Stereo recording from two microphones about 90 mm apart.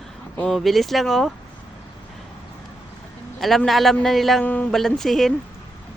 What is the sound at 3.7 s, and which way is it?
Speech, centre (ahead or behind).